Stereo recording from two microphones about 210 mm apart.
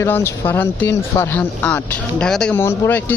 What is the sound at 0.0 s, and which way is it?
Speech, 10° left (ahead or behind).